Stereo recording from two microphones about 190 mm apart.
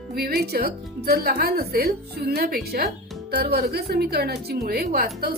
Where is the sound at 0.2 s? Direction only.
55° right (ahead or behind).